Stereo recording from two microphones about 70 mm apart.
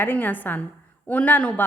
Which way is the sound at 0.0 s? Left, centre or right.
Left.